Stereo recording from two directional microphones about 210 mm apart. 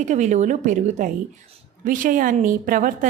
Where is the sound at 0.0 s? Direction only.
35° right (ahead or behind).